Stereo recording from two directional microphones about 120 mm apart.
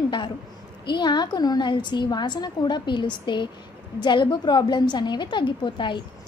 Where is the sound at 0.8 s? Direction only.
40° left (ahead or behind).